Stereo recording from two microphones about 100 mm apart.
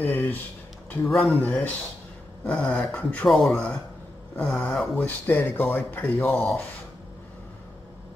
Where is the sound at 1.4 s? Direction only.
10° left (ahead or behind).